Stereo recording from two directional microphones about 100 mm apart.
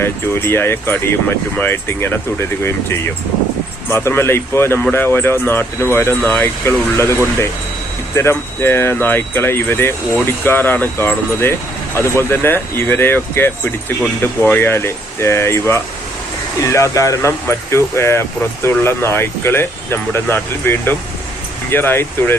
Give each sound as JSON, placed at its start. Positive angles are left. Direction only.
{"t": 0.0, "sound": "speech", "side_deg": 25}